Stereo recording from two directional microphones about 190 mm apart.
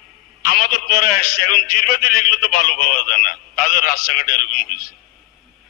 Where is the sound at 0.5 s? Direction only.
50° left (ahead or behind).